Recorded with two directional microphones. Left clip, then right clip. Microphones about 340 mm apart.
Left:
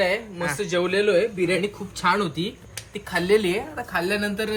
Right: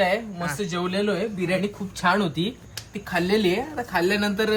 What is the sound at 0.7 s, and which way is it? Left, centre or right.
Speech, right.